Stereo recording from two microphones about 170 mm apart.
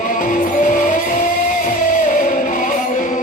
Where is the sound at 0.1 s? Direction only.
50° left (ahead or behind).